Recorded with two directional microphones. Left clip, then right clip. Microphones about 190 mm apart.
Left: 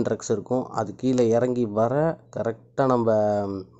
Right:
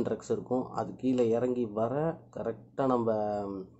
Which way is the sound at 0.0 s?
35° left (ahead or behind).